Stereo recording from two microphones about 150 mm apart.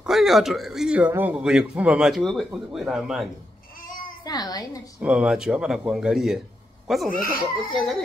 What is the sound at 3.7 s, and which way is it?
Child singing, 70° left (ahead or behind).